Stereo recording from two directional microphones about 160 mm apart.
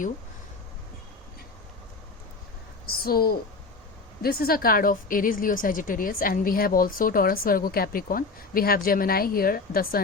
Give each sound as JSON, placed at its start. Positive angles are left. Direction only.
{"t": 2.8, "sound": "a woman's voice", "side_deg": 70}